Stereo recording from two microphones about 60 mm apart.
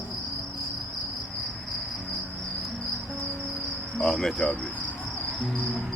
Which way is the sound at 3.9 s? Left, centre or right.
Centre.